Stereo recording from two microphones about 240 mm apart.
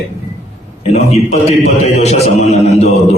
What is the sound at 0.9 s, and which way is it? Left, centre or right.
A man's voice, left.